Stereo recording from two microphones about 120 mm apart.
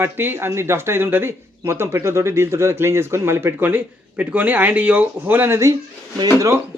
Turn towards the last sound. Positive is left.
turn(degrees=-25)  # may be behind; listen again after turning